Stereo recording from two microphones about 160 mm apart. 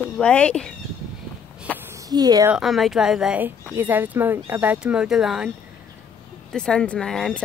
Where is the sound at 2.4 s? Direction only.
5° right (ahead or behind).